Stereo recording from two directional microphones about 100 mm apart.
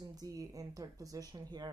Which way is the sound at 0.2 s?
35° right (ahead or behind).